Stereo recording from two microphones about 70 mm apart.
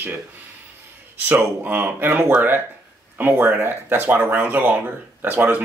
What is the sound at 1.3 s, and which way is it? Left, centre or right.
Speech, right.